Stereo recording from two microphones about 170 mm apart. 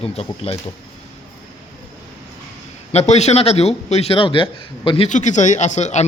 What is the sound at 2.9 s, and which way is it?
Speech, 40° left (ahead or behind).